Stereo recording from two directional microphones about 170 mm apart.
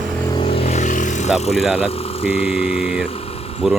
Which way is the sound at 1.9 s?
35° left (ahead or behind).